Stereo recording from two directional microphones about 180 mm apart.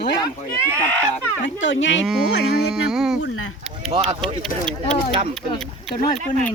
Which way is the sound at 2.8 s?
5° right (ahead or behind).